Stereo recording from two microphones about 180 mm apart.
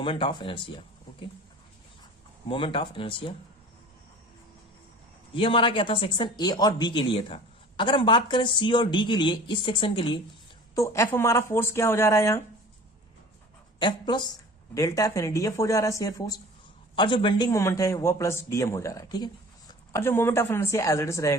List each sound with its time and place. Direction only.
0.0 s speech: 25° left (ahead or behind)
2.5 s speech: 30° left (ahead or behind)
5.3 s speech: 30° left (ahead or behind)
10.8 s a man's voice: 15° left (ahead or behind)
13.7 s a woman's voice: 25° left (ahead or behind)